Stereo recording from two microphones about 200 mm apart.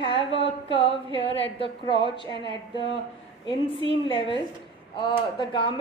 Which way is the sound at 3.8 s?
25° left (ahead or behind).